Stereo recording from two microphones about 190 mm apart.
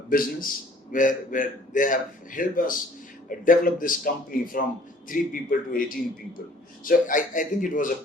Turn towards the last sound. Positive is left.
turn(degrees=45)  # may be behind; listen again after turning